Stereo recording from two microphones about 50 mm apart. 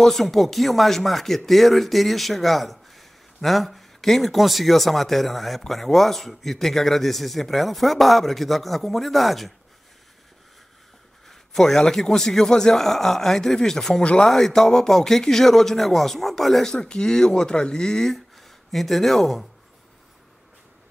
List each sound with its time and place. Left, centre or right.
0.0 s speech: centre
11.2 s a man's voice: centre
14.3 s a man's voice: centre
16.7 s a man's voice: centre